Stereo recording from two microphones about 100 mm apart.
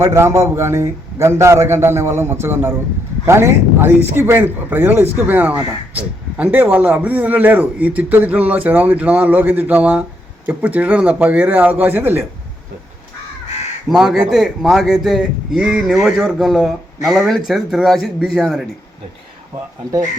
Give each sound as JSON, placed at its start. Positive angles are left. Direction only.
{"t": 0.0, "sound": "a man's voice", "side_deg": -25}
{"t": 13.8, "sound": "speech", "side_deg": -5}